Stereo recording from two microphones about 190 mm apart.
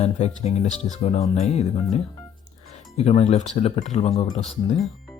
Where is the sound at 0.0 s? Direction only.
35° left (ahead or behind).